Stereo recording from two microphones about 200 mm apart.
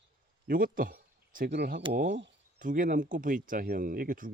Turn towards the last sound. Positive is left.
turn(degrees=-45)  # may be behind; listen again after turning